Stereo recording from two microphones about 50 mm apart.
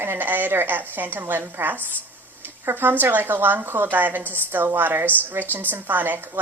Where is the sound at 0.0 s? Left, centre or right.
Right.